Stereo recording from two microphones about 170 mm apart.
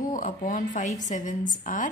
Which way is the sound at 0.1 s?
50° left (ahead or behind).